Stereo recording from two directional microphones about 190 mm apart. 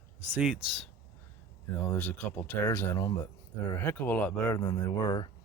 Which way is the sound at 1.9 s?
5° left (ahead or behind).